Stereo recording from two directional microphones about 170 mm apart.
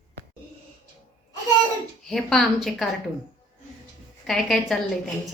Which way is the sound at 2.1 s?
Centre (ahead or behind).